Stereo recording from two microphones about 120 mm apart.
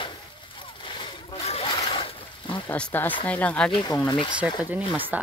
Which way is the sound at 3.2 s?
10° left (ahead or behind).